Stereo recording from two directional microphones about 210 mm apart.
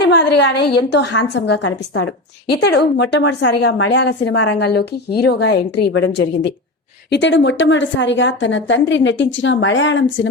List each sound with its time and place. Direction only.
0.0 s a woman's voice: 55° left (ahead or behind)